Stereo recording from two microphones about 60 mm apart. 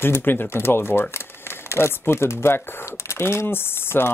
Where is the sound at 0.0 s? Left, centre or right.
Left.